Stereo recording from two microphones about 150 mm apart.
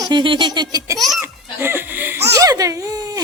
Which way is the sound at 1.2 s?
15° right (ahead or behind).